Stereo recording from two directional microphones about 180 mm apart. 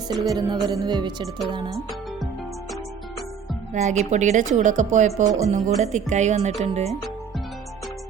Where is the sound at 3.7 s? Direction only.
40° right (ahead or behind).